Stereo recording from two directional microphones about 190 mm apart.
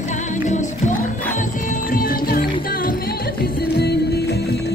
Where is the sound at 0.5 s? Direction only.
40° left (ahead or behind); by 4.4 s 55° left (ahead or behind).